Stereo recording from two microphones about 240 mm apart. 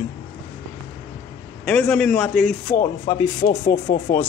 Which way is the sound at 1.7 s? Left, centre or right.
Centre.